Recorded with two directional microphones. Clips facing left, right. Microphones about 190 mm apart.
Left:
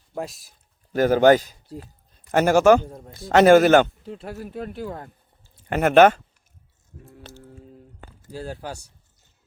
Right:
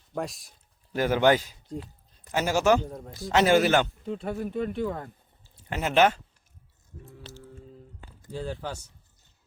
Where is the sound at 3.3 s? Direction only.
50° left (ahead or behind).